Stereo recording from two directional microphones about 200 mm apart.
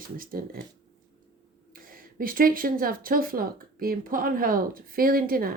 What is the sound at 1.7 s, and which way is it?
Speech, 45° right (ahead or behind).